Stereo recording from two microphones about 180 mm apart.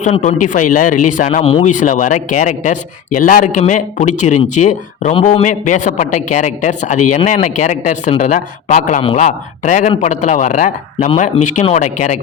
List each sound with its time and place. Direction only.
0.0 s a man's voice: 40° left (ahead or behind)